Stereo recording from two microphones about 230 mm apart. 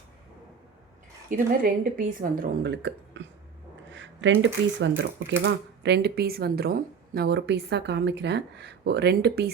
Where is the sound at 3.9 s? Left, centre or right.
Right.